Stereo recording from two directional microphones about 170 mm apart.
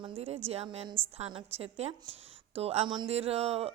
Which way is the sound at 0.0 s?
35° right (ahead or behind).